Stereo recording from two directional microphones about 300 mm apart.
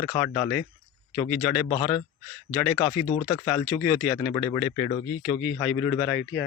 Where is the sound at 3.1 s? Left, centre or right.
Centre.